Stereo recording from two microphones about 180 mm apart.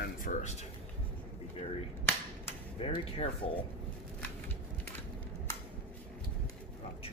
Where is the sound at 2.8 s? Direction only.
30° left (ahead or behind).